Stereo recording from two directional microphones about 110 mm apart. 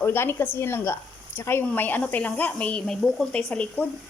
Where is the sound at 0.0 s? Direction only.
20° left (ahead or behind).